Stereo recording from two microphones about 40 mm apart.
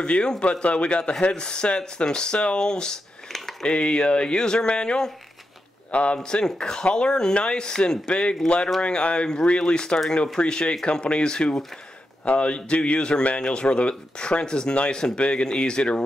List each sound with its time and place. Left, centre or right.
0.0 s speech: left
3.3 s a sound: centre
3.6 s speech: left
6.1 s speech: centre